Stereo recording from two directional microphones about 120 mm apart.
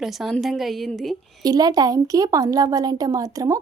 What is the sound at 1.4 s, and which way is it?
A woman's voice, 35° right (ahead or behind).